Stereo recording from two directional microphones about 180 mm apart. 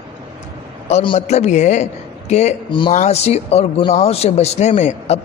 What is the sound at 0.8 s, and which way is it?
A man's voice, 35° left (ahead or behind).